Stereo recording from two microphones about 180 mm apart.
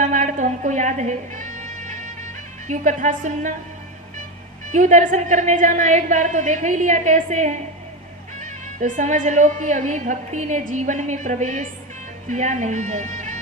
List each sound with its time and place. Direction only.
0.0 s music: 45° right (ahead or behind)
2.6 s speech: 45° right (ahead or behind)
4.7 s speech: 45° right (ahead or behind)